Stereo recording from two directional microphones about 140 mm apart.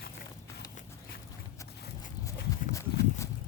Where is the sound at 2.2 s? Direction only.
20° left (ahead or behind).